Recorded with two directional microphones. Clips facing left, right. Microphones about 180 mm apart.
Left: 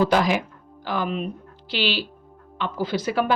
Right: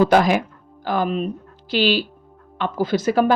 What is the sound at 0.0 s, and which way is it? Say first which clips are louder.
A woman's voice: right 4 dB; 50° right (ahead or behind).